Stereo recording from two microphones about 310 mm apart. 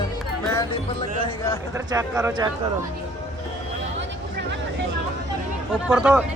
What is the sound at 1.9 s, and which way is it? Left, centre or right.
Speech, centre.